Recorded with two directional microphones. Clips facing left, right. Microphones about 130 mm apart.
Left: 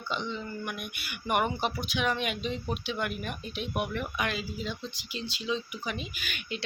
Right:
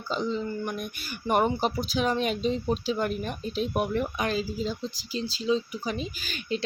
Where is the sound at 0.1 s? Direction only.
35° right (ahead or behind).